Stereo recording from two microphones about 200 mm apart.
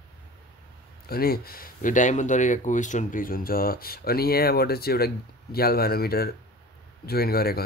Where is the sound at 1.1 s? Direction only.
50° left (ahead or behind).